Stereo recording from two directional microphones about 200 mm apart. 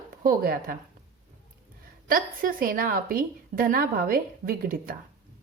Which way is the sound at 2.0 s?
45° right (ahead or behind).